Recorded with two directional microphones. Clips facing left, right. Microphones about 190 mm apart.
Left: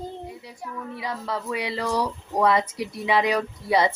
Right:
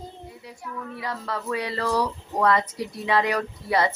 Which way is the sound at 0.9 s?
15° left (ahead or behind).